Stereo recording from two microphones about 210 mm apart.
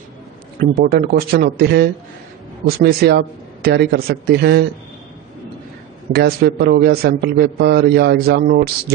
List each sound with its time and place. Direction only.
0.8 s a man's voice: 45° right (ahead or behind)
6.1 s a man's voice: 50° right (ahead or behind)